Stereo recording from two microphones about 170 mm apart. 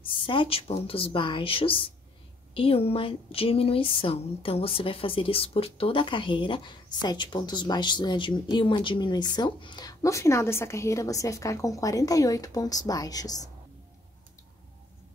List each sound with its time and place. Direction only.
0.0 s speech: 30° left (ahead or behind)